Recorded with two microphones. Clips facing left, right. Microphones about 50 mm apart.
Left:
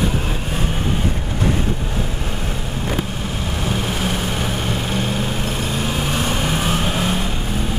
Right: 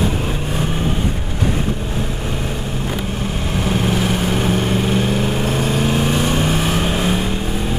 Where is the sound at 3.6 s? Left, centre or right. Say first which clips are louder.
Right 4 dB; centre.